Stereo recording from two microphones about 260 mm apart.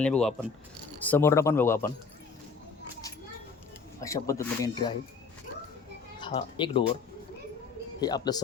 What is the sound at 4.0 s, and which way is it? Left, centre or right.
Speech, centre.